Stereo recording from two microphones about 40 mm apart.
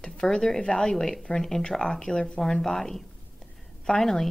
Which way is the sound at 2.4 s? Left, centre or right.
Centre.